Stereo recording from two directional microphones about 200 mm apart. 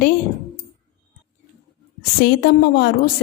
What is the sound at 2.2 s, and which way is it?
Speech, 55° left (ahead or behind).